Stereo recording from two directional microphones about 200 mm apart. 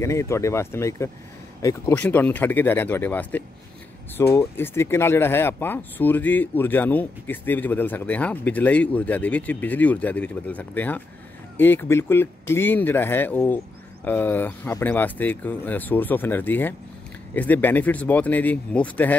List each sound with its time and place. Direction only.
0.0 s speech: 15° left (ahead or behind)